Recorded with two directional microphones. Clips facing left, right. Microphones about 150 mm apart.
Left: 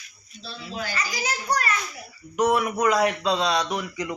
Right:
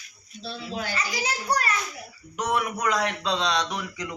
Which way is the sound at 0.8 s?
25° right (ahead or behind).